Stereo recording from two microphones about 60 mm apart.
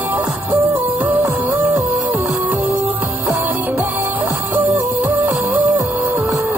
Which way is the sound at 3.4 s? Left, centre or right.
Right.